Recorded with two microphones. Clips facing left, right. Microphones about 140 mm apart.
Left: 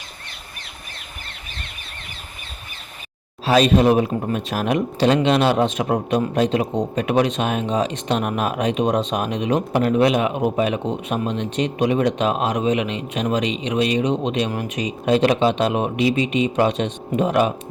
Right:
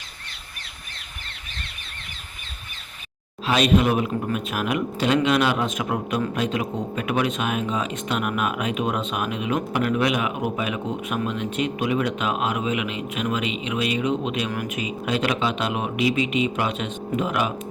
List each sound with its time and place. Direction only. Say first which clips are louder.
3.4 s speech: left 4 dB; 35° left (ahead or behind)